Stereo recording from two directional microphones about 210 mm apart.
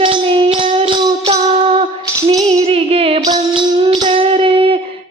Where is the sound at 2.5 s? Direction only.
30° right (ahead or behind).